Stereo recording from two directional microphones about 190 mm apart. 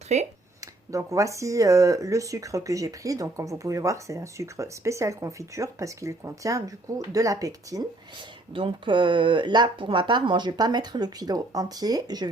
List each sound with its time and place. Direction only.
0.1 s speech: 35° right (ahead or behind)
0.9 s speech: 15° right (ahead or behind)